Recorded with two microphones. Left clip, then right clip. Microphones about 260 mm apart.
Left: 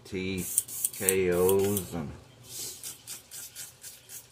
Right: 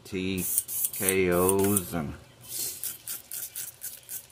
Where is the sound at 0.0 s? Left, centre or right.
Centre.